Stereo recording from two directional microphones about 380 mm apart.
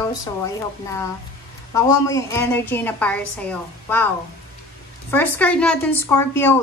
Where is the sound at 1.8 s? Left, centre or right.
Centre.